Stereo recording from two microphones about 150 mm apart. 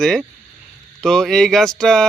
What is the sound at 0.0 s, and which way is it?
Speech, centre (ahead or behind).